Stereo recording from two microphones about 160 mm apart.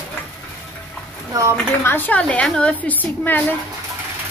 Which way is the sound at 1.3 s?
20° right (ahead or behind).